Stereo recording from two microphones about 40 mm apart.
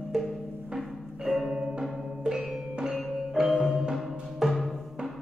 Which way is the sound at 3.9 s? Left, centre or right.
Centre.